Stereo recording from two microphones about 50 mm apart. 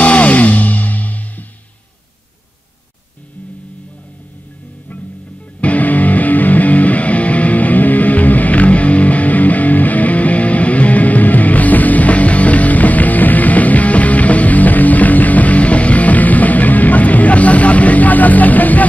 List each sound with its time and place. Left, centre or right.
0.0 s music: left
5.6 s music: left